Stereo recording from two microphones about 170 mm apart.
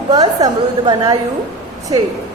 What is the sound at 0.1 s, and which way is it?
A woman's voice, 25° right (ahead or behind).